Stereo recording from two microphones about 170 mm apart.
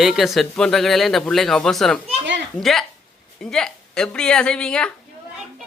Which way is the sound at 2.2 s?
90° right.